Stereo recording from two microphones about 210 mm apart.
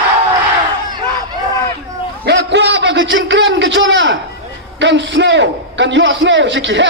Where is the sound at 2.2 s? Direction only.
55° right (ahead or behind).